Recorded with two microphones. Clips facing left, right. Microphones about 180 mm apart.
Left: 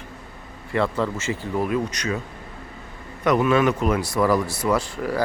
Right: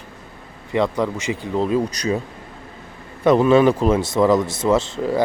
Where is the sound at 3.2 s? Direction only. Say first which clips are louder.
Right 5 dB; 30° right (ahead or behind).